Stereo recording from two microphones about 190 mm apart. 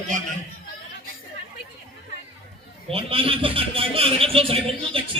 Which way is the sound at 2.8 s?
30° right (ahead or behind).